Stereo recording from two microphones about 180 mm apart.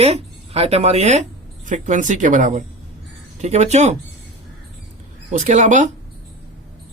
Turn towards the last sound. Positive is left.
turn(degrees=-40)  # may be behind; listen again after turning